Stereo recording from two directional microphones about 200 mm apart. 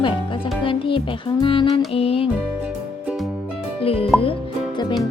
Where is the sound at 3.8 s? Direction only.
30° left (ahead or behind).